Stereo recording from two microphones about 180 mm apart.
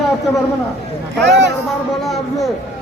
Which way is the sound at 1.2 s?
75° right (ahead or behind).